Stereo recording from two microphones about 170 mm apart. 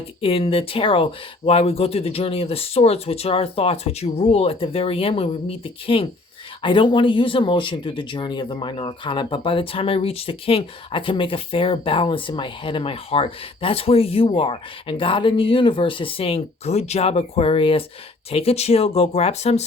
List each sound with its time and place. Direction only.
0.2 s speech: 35° left (ahead or behind)